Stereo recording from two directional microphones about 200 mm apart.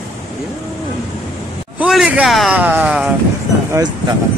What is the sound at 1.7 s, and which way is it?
Speech, 5° right (ahead or behind).